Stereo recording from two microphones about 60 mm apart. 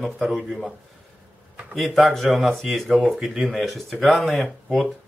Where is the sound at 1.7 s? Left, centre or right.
Centre.